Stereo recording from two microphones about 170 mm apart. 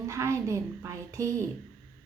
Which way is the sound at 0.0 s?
15° right (ahead or behind).